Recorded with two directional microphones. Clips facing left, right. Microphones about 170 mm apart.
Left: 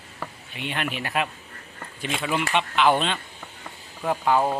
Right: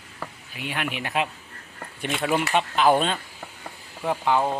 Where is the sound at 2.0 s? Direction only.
50° right (ahead or behind).